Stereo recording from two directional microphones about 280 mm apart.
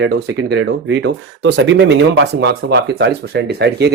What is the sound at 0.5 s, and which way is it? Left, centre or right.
Speech, right.